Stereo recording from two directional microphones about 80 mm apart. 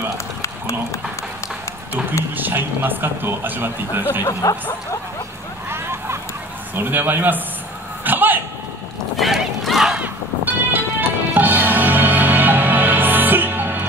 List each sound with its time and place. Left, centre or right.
2.3 s speech: right
4.2 s speech: left
5.7 s a sound: right
6.7 s speech: right
8.0 s a sound: right
9.1 s run: centre
9.9 s music: right